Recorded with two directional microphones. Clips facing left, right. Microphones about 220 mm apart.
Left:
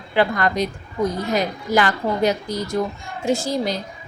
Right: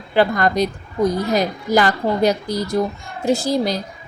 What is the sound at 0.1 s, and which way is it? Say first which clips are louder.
A woman's voice: right 3 dB; 40° right (ahead or behind).